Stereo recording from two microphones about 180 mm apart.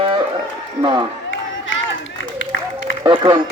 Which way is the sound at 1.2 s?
90° left.